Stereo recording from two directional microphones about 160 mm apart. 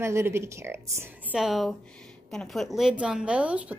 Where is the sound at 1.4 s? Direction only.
Centre (ahead or behind).